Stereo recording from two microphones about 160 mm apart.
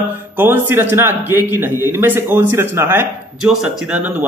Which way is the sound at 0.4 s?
15° right (ahead or behind).